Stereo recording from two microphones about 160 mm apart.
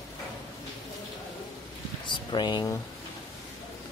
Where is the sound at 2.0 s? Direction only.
30° left (ahead or behind).